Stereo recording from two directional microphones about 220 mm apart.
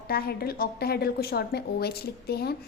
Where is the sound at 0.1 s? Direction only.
45° left (ahead or behind).